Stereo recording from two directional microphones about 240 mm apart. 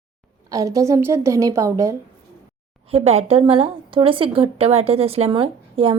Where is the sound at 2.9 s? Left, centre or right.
Right.